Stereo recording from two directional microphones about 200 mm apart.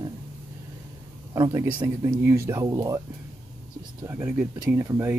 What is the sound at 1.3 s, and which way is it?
Speech, 15° right (ahead or behind).